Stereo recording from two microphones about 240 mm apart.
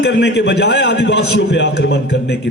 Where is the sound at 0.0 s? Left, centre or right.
Left.